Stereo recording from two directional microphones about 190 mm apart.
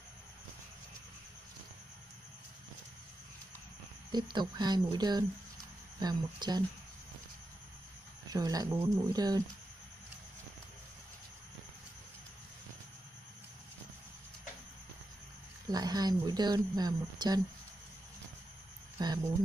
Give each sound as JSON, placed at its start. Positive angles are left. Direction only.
{"t": 4.1, "sound": "speech", "side_deg": -20}
{"t": 8.3, "sound": "speech", "side_deg": -20}
{"t": 15.7, "sound": "speech", "side_deg": -20}
{"t": 19.0, "sound": "speech", "side_deg": -20}